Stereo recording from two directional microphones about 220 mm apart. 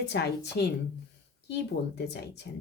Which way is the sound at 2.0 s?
50° left (ahead or behind).